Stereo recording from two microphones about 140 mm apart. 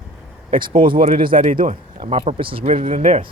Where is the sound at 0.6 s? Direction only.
35° right (ahead or behind).